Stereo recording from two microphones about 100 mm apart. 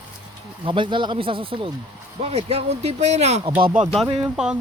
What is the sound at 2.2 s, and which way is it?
Speech, 90° right.